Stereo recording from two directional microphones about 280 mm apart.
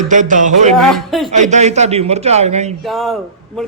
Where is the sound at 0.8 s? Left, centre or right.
Centre.